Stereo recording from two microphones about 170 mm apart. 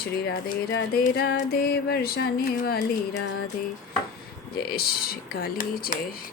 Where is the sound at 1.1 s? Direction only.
70° left (ahead or behind).